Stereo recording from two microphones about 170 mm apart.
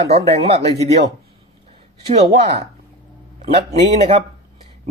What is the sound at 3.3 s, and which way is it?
Speech, 40° right (ahead or behind).